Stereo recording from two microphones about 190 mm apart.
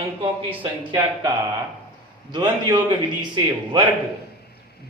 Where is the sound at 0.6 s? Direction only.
25° right (ahead or behind).